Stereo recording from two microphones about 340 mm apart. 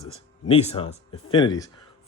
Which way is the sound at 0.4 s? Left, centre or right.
Centre.